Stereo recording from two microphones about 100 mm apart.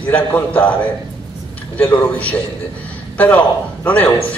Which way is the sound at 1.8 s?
15° left (ahead or behind).